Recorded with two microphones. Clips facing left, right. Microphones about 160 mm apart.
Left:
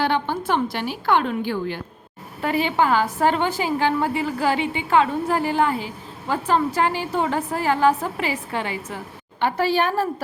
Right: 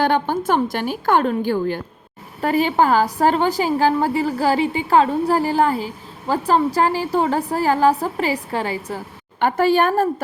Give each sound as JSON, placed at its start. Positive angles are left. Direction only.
{"t": 0.0, "sound": "a woman's voice", "side_deg": -45}
{"t": 9.4, "sound": "a woman's voice", "side_deg": -45}